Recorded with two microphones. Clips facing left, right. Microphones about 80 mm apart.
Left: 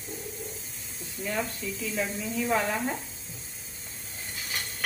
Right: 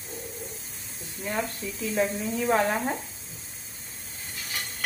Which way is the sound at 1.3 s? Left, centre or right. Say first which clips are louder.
Right 1 dB; right.